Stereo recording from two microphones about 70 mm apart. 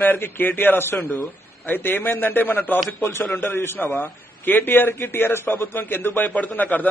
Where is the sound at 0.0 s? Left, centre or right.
Left.